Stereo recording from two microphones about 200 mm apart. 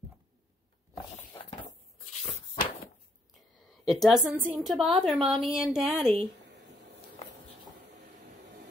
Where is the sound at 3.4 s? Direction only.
Centre (ahead or behind).